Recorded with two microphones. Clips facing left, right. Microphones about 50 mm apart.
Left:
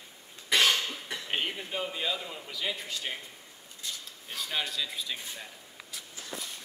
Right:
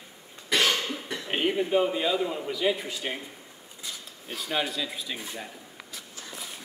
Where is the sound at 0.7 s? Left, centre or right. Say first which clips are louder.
Right 2 dB; centre.